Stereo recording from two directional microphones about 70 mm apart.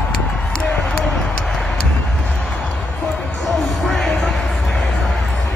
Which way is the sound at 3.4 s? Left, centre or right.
Centre.